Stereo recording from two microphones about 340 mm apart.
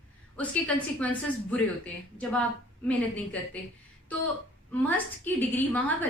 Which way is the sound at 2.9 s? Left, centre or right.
Centre.